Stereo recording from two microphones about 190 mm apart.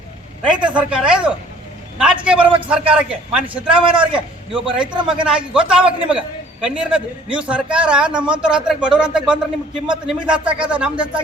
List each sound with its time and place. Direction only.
0.4 s a man's voice: 5° right (ahead or behind)
5.2 s a man's voice: 5° right (ahead or behind)